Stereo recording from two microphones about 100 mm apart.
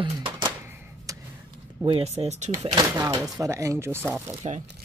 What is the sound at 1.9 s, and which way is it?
Speech, 90° right.